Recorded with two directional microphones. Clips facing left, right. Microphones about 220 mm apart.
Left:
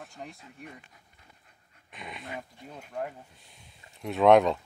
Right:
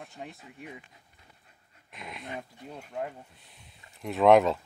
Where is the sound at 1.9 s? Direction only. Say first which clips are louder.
Even; centre (ahead or behind).